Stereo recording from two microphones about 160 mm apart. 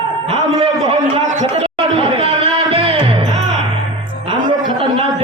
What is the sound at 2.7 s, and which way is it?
Music, 35° right (ahead or behind).